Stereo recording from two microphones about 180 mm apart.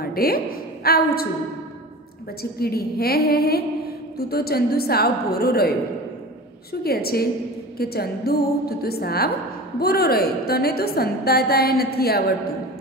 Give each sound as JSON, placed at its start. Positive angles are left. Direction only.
{"t": 0.0, "sound": "a woman's voice", "side_deg": 55}
{"t": 2.6, "sound": "a woman's voice", "side_deg": 60}
{"t": 6.7, "sound": "a woman's voice", "side_deg": 60}